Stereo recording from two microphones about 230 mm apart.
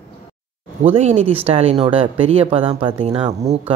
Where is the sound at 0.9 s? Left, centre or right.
Right.